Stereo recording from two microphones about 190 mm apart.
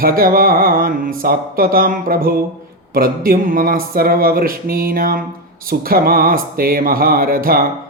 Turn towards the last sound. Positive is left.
turn(degrees=-50)  # may be behind; listen again after turning